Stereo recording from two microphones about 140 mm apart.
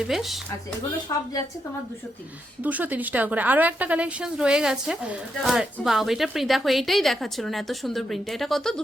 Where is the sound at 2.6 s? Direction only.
10° right (ahead or behind).